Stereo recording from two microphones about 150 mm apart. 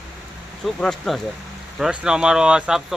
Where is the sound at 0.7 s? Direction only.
5° left (ahead or behind).